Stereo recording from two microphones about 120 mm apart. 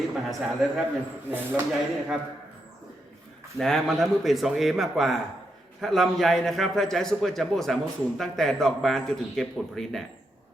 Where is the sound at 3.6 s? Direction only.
Centre (ahead or behind).